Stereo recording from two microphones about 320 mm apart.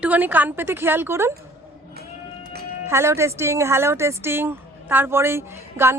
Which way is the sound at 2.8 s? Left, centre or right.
Centre.